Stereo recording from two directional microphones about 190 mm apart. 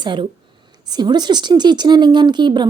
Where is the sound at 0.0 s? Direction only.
25° right (ahead or behind).